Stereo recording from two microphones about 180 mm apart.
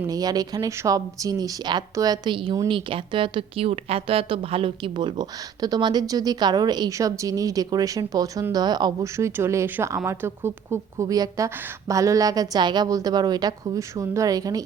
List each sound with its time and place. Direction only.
0.1 s speech: 20° right (ahead or behind)